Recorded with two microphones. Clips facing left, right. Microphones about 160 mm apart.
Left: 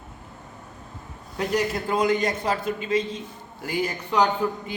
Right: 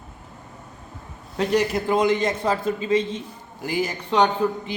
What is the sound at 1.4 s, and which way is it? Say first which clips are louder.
A man's voice: right 4 dB; 25° right (ahead or behind).